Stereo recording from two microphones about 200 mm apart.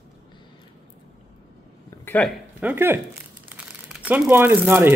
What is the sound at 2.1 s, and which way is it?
Speech, 5° left (ahead or behind).